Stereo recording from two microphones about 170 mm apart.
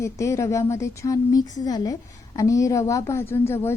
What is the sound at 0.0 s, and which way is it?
Speech, 15° left (ahead or behind).